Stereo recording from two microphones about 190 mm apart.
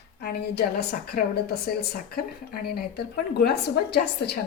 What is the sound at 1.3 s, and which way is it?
Speech, 55° left (ahead or behind).